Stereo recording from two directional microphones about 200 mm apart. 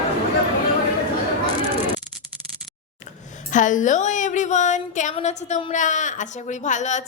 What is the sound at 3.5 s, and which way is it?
A woman's voice, 40° left (ahead or behind).